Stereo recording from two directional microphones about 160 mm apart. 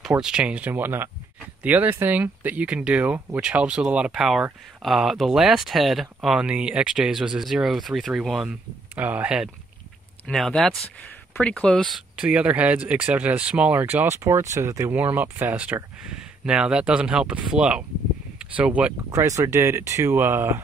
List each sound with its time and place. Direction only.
0.1 s speech: 5° right (ahead or behind)
10.2 s speech: 5° left (ahead or behind)
19.0 s speech: 20° right (ahead or behind)